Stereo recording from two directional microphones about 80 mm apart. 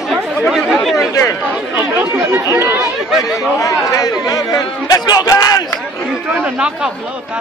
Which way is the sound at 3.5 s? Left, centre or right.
Left.